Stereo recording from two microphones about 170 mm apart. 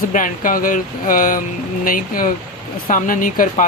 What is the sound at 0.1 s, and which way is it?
Speech, 50° left (ahead or behind).